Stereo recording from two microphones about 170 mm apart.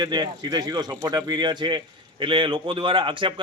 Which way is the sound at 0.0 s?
25° right (ahead or behind).